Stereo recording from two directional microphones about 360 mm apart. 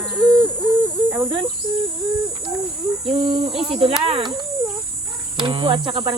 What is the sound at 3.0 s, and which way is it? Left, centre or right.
Speech, centre.